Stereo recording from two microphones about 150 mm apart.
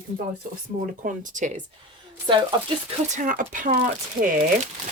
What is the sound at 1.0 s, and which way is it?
Speech, 55° right (ahead or behind).